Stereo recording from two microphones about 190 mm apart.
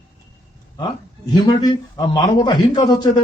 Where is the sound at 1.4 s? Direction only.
20° left (ahead or behind).